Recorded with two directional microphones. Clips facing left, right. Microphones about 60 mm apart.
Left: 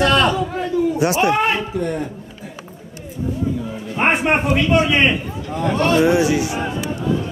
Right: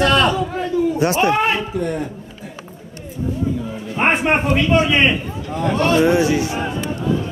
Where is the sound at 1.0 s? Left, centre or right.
Right.